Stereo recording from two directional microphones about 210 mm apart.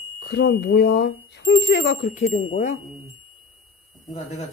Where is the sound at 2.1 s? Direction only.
30° left (ahead or behind).